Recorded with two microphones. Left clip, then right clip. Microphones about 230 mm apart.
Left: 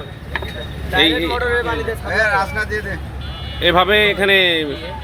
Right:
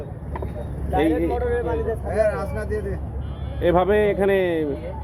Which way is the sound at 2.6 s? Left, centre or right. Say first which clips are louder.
Left 7 dB; right.